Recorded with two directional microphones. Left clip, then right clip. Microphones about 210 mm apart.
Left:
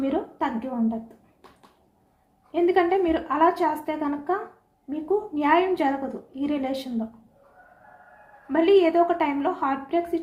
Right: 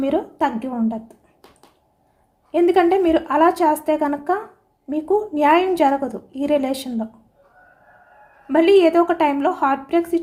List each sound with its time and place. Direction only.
0.0 s a woman's voice: 55° right (ahead or behind)
2.5 s a woman's voice: 55° right (ahead or behind)
8.5 s a woman's voice: 55° right (ahead or behind)